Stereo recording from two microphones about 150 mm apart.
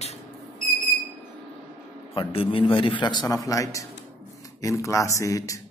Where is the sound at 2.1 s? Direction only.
35° left (ahead or behind).